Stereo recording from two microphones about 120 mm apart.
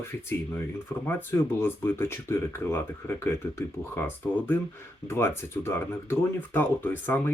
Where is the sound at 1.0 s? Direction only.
20° left (ahead or behind).